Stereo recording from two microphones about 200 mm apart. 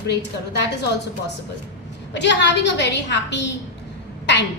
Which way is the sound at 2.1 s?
60° left (ahead or behind).